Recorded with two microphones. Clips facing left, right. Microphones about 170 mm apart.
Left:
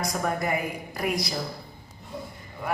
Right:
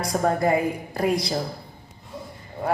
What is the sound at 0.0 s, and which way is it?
Speech, 30° right (ahead or behind).